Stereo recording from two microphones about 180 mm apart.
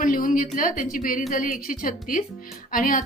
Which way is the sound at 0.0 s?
50° left (ahead or behind).